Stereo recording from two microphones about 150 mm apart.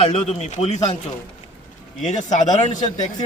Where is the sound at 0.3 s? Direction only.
50° left (ahead or behind).